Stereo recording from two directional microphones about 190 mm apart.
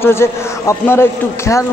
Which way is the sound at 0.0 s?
15° left (ahead or behind).